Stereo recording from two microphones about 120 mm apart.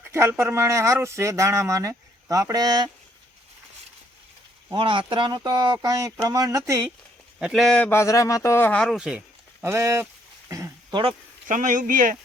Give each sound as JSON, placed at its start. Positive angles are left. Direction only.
{"t": 0.0, "sound": "speech", "side_deg": -20}
{"t": 4.7, "sound": "speech", "side_deg": -40}
{"t": 7.3, "sound": "speech", "side_deg": -5}
{"t": 7.8, "sound": "speech", "side_deg": 20}
{"t": 8.7, "sound": "speech", "side_deg": 5}
{"t": 9.0, "sound": "a sound", "side_deg": -10}
{"t": 9.6, "sound": "speech", "side_deg": -25}
{"t": 11.4, "sound": "a man's voice", "side_deg": -90}